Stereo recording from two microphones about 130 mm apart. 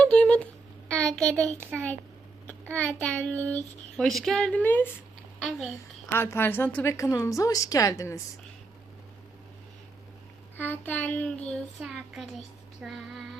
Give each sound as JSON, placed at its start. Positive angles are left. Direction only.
{"t": 0.0, "sound": "a sound", "side_deg": 10}
{"t": 0.9, "sound": "child singing", "side_deg": 5}
{"t": 5.4, "sound": "child singing", "side_deg": 0}
{"t": 6.1, "sound": "a woman's voice", "side_deg": 20}
{"t": 10.6, "sound": "child singing", "side_deg": 15}
{"t": 11.8, "sound": "child singing", "side_deg": 0}